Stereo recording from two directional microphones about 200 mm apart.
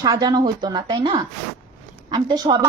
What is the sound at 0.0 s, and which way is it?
A child's voice, 20° right (ahead or behind).